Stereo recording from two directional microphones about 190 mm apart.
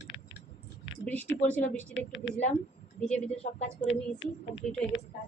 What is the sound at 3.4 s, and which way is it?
Speech, 35° left (ahead or behind).